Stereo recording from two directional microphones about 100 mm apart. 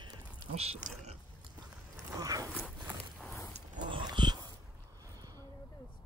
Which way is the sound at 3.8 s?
50° right (ahead or behind).